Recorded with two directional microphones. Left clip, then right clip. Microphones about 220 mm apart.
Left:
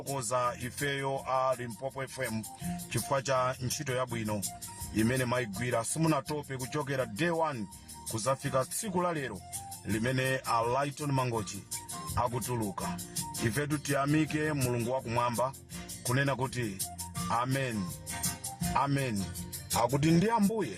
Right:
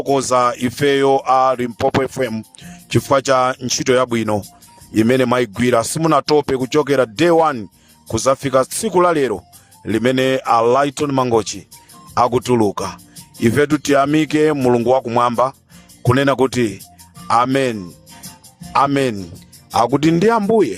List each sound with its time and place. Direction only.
0.1 s speech: 45° right (ahead or behind)
19.8 s music: 40° right (ahead or behind)